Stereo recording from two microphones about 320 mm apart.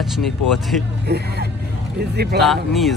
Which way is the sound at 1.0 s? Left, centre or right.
Right.